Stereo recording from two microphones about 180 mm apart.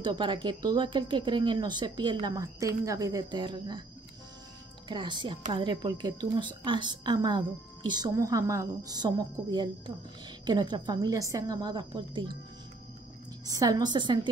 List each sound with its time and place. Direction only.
0.0 s a woman's voice: 25° right (ahead or behind)
4.8 s a woman's voice: 25° right (ahead or behind)
13.5 s a woman's voice: 20° right (ahead or behind)